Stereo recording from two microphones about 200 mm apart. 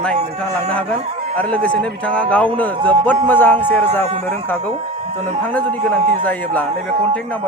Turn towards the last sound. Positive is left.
turn(degrees=10)  # may be behind; listen again after turning